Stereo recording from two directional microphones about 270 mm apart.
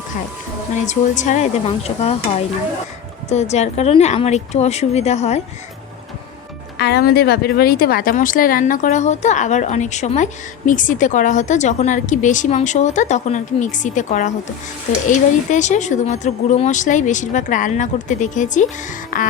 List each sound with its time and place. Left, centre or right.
0.9 s a woman's voice: left
3.2 s a woman's voice: left
6.7 s a woman's voice: left